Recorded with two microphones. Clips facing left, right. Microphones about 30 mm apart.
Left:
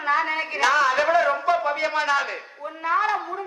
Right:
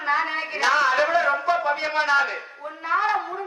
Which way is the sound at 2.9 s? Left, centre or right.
Centre.